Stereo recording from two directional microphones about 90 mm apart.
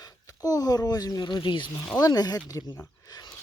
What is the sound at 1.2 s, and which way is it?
Speech, 65° left (ahead or behind).